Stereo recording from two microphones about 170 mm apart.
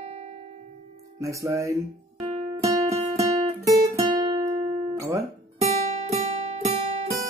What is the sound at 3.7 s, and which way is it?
Guitar, 25° right (ahead or behind).